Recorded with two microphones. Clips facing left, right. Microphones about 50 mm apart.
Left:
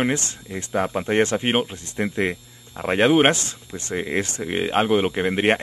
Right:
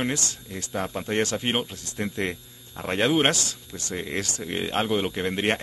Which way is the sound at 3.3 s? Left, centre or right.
Left.